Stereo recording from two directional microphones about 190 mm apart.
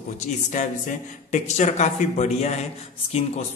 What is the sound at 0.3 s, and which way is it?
A man's voice, 40° left (ahead or behind).